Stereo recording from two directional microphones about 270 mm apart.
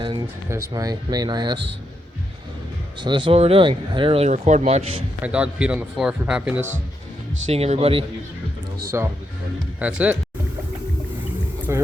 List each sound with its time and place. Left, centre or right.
0.0 s speech: centre
3.0 s speech: centre
5.2 s speech: centre
7.5 s speech: right
8.9 s speech: centre
11.7 s speech: centre